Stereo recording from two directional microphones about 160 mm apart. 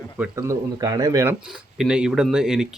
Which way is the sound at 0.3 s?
20° right (ahead or behind).